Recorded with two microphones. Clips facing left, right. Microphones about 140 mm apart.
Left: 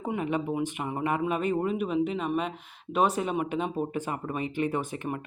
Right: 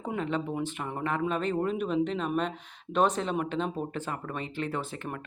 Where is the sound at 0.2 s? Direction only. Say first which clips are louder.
Left 1 dB; 10° left (ahead or behind).